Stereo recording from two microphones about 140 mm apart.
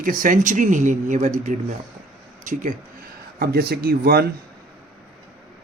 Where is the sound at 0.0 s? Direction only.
75° right (ahead or behind); by 1.3 s 60° right (ahead or behind).